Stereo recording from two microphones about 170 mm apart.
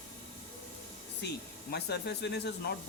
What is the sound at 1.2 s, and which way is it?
Speech, 85° left.